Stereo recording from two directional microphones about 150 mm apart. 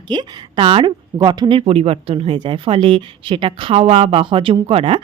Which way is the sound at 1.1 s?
30° right (ahead or behind).